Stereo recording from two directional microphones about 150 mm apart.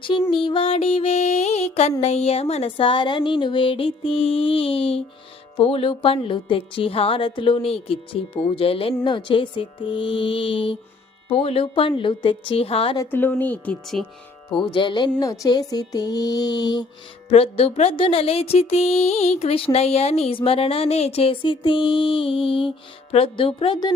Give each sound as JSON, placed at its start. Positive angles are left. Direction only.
{"t": 0.0, "sound": "music", "side_deg": 35}
{"t": 13.0, "sound": "speech", "side_deg": 15}
{"t": 14.5, "sound": "music", "side_deg": 35}
{"t": 15.4, "sound": "a sound", "side_deg": 25}
{"t": 17.2, "sound": "music", "side_deg": 40}